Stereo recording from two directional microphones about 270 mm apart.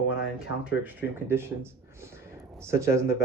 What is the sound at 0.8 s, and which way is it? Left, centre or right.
Speech, centre.